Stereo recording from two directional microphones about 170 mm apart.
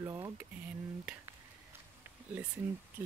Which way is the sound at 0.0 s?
20° right (ahead or behind).